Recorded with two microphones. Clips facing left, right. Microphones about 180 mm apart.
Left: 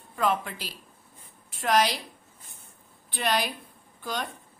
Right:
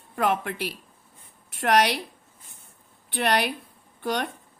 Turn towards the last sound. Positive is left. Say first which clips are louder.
# right 6 dB
turn(degrees=-65)  # may be behind; listen again after turning